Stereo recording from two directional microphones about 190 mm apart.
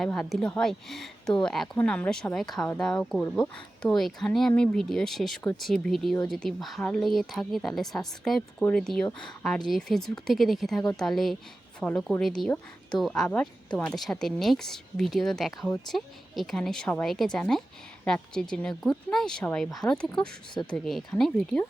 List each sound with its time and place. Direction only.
0.0 s speech: 5° left (ahead or behind)